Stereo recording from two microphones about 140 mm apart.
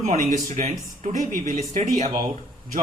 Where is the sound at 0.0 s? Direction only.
60° right (ahead or behind).